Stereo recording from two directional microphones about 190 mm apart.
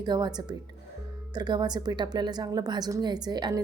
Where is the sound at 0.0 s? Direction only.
20° right (ahead or behind).